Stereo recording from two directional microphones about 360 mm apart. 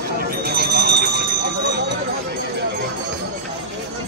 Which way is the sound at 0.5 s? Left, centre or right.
Right.